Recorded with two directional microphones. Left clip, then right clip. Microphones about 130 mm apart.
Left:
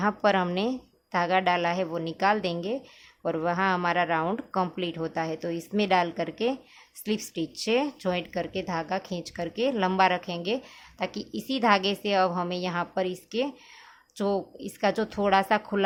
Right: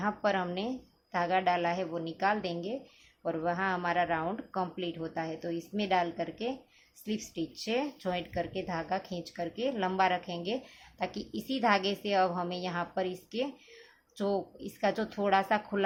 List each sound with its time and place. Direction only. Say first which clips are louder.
0.0 s speech: left 6 dB; 45° left (ahead or behind)